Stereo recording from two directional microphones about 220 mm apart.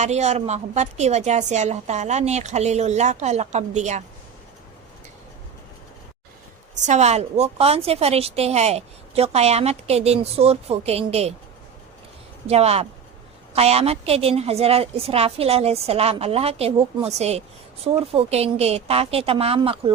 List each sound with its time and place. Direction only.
0.0 s a woman's voice: 30° right (ahead or behind)
6.8 s a woman's voice: 30° right (ahead or behind)
12.5 s a woman's voice: 30° right (ahead or behind)